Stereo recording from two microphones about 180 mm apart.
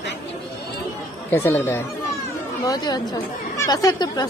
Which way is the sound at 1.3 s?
15° left (ahead or behind).